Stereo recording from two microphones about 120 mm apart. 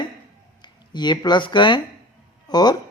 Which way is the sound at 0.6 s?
35° left (ahead or behind).